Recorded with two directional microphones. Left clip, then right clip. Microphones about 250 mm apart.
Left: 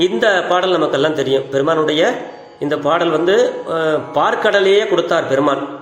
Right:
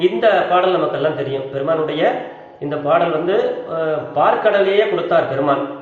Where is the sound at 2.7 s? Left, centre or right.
Left.